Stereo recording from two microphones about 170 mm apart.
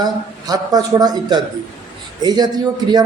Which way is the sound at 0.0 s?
20° right (ahead or behind).